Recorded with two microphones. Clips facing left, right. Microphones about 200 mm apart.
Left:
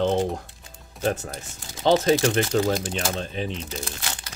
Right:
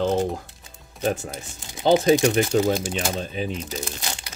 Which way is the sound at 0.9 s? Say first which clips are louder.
Right 1 dB; 15° right (ahead or behind).